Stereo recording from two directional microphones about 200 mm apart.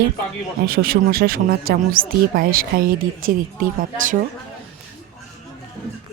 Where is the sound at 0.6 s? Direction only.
50° right (ahead or behind).